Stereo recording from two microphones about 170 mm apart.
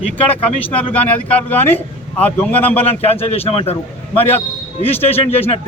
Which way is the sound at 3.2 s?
35° left (ahead or behind).